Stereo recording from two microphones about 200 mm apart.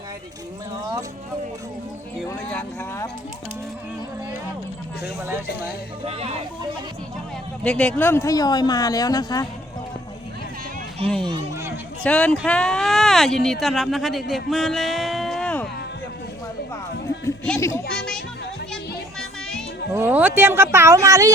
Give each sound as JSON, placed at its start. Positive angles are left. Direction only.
{"t": 2.3, "sound": "speech", "side_deg": 10}
{"t": 6.1, "sound": "speech", "side_deg": -30}
{"t": 7.6, "sound": "speech", "side_deg": 5}
{"t": 11.2, "sound": "a sound", "side_deg": -20}
{"t": 12.0, "sound": "speech", "side_deg": 5}
{"t": 17.2, "sound": "chatter", "side_deg": 10}
{"t": 19.9, "sound": "speech", "side_deg": -10}